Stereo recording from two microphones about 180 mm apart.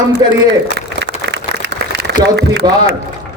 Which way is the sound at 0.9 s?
75° right (ahead or behind).